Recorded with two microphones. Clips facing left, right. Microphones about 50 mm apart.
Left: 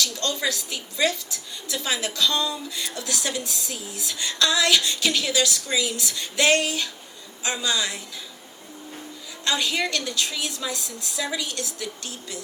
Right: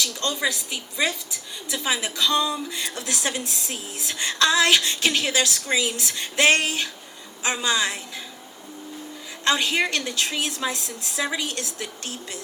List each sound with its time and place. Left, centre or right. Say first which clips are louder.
0.0 s a woman's voice: right 1 dB; right
9.4 s a woman's voice: right 3 dB; right